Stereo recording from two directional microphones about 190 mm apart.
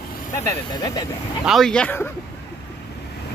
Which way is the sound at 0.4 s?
20° left (ahead or behind).